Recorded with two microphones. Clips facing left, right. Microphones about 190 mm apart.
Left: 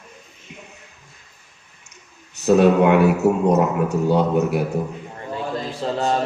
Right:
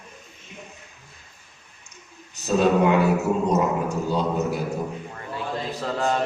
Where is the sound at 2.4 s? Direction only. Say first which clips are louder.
Left 5 dB; 65° left (ahead or behind).